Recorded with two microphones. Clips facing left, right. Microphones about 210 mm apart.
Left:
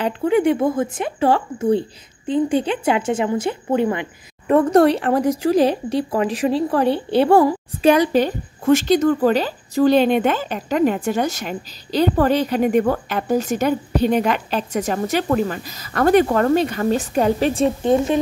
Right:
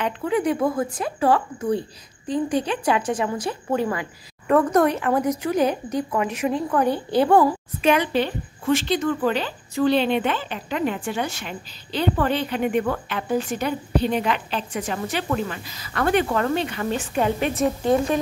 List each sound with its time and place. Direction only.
0.0 s a woman's voice: 30° left (ahead or behind)